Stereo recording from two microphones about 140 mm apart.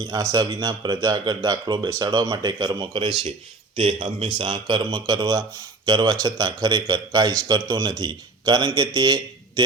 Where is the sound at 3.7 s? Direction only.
45° right (ahead or behind).